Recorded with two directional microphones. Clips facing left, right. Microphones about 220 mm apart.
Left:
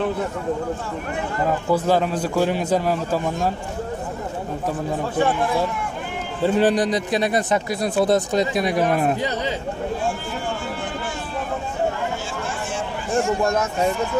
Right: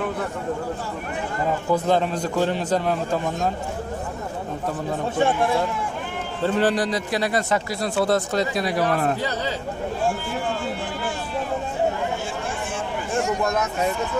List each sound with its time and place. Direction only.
1.7 s a man's voice: 5° left (ahead or behind)
6.4 s speech: 15° left (ahead or behind)